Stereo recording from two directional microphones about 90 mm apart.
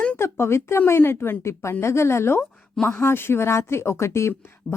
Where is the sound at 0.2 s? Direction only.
30° left (ahead or behind).